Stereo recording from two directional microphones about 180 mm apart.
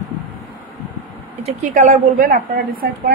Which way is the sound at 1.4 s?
45° right (ahead or behind).